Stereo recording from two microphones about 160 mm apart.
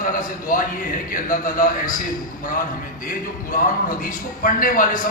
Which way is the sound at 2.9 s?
60° left (ahead or behind).